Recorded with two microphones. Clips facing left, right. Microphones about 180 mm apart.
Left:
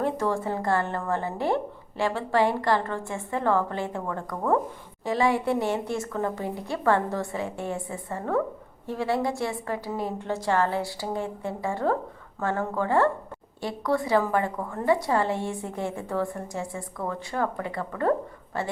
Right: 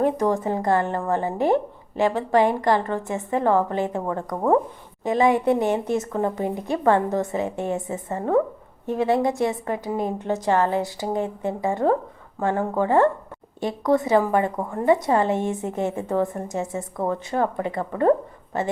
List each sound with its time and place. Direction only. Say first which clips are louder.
0.0 s a woman's voice: right 5 dB; 15° right (ahead or behind)